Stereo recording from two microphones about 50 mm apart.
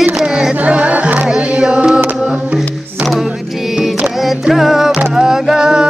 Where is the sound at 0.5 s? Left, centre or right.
Right.